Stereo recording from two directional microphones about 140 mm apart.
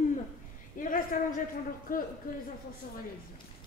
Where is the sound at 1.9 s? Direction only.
75° left (ahead or behind).